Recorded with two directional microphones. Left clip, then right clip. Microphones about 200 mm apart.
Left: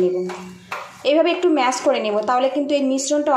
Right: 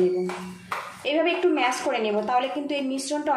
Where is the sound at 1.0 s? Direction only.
30° left (ahead or behind).